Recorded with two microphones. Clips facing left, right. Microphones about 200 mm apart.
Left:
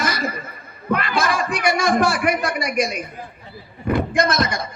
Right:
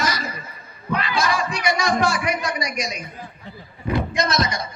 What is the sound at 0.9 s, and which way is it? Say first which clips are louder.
Speech: left 2 dB; 55° left (ahead or behind).